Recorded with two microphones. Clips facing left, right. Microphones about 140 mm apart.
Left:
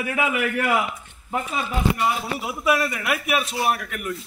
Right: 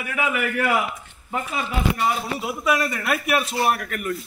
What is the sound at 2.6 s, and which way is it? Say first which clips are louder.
A man's voice: left 1 dB; 5° left (ahead or behind).